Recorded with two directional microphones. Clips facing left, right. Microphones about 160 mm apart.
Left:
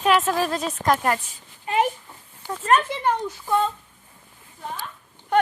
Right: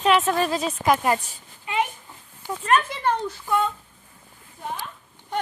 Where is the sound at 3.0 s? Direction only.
15° left (ahead or behind).